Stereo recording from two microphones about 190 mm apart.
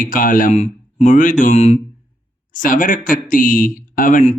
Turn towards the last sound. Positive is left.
turn(degrees=40)  # may be behind; listen again after turning